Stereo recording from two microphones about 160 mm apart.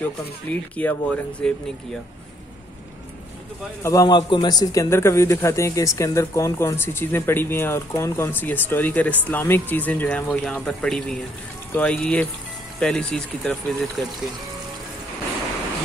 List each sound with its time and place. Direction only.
0.5 s a man's voice: 10° left (ahead or behind)
3.8 s a man's voice: 20° left (ahead or behind); by 14.3 s centre (ahead or behind)